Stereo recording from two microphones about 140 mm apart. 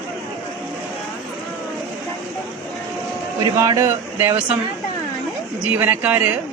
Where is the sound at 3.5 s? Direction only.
25° right (ahead or behind).